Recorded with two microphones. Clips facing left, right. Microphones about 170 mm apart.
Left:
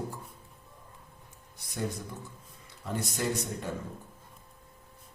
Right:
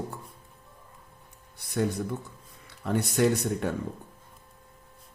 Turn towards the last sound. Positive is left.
turn(degrees=-65)  # may be behind; listen again after turning